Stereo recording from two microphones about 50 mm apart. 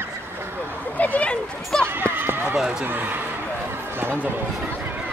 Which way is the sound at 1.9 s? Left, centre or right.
Right.